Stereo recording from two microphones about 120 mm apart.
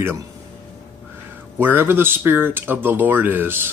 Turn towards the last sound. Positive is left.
turn(degrees=-20)  # may be behind; listen again after turning